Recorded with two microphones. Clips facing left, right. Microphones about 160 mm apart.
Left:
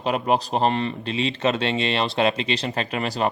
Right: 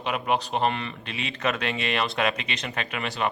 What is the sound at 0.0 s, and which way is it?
Speech, 35° left (ahead or behind).